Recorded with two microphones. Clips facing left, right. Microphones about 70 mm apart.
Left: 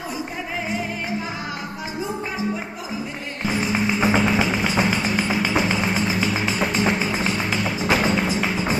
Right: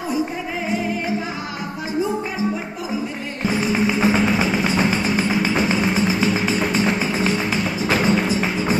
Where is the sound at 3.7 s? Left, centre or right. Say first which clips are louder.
Right 1 dB; left.